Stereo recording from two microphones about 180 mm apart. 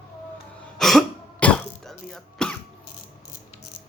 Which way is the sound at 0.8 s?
Centre (ahead or behind).